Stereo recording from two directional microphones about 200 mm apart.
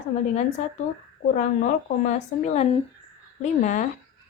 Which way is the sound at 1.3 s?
35° left (ahead or behind).